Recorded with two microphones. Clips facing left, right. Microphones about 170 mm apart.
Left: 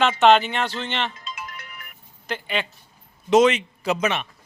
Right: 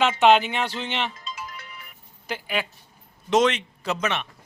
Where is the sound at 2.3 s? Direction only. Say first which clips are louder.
Left 1 dB; 5° right (ahead or behind).